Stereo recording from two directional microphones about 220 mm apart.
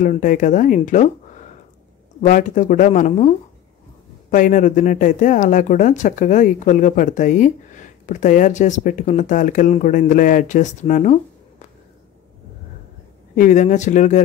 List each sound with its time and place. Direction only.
0.0 s speech: 35° left (ahead or behind)
2.2 s speech: 35° left (ahead or behind)
13.4 s speech: 35° left (ahead or behind)